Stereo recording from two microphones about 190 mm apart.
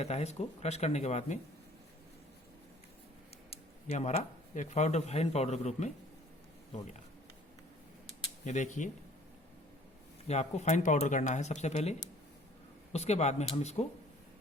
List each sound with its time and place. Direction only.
0.0 s a man's voice: 35° left (ahead or behind)
3.8 s a man's voice: 35° left (ahead or behind)
8.4 s a man's voice: 40° left (ahead or behind)
10.2 s a man's voice: 35° left (ahead or behind)